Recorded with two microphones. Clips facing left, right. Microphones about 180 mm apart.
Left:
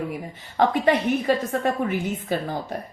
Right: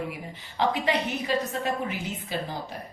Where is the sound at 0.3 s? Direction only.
50° left (ahead or behind).